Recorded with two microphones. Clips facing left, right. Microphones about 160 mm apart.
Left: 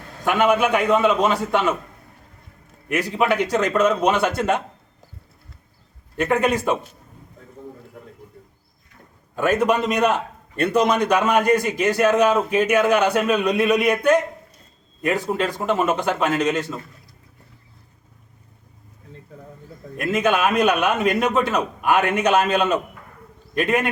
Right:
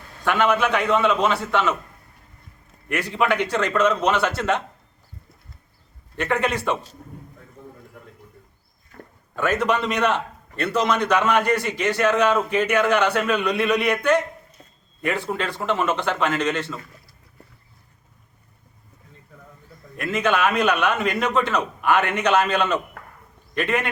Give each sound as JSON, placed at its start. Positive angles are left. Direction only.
{"t": 0.3, "sound": "speech", "side_deg": 10}
{"t": 3.0, "sound": "speech", "side_deg": 5}
{"t": 6.1, "sound": "speech", "side_deg": 10}
{"t": 8.9, "sound": "a sound", "side_deg": -65}
{"t": 9.3, "sound": "speech", "side_deg": 10}
{"t": 15.4, "sound": "speech", "side_deg": 10}
{"t": 20.0, "sound": "speech", "side_deg": 10}